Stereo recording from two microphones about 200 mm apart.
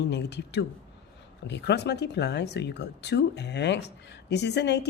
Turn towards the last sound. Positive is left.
turn(degrees=60)  # may be behind; listen again after turning